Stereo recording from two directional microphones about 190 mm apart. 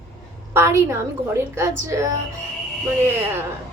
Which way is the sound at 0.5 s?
15° right (ahead or behind).